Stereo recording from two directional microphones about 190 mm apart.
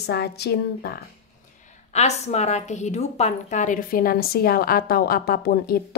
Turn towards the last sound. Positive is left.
turn(degrees=55)  # may be behind; listen again after turning